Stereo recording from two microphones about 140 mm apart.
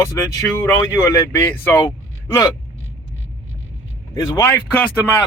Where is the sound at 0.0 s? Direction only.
20° left (ahead or behind).